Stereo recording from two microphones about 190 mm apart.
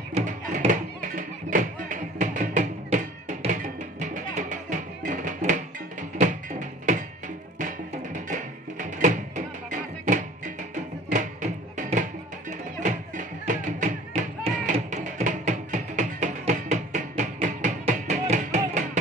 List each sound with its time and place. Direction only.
0.1 s music: 40° right (ahead or behind)